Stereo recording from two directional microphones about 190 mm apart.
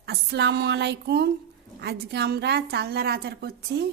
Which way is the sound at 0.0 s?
60° right (ahead or behind).